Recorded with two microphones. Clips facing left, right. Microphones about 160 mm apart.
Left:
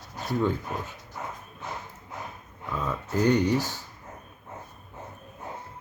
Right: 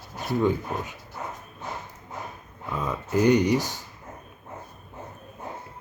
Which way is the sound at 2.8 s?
15° right (ahead or behind).